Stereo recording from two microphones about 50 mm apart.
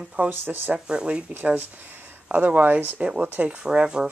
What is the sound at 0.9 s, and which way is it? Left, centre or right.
Speech, centre.